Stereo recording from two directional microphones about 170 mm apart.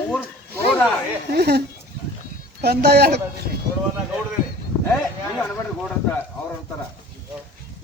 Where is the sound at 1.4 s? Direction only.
70° right (ahead or behind).